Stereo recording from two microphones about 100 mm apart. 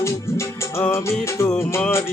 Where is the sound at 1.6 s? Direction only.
10° left (ahead or behind).